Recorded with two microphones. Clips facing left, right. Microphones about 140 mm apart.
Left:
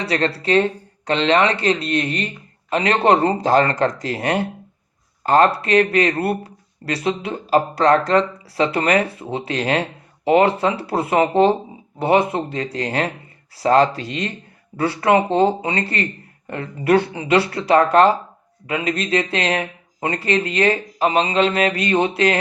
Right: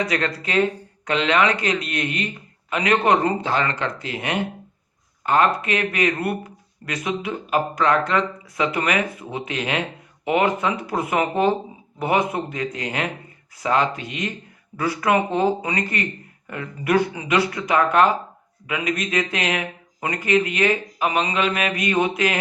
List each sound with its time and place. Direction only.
0.0 s speech: 30° left (ahead or behind)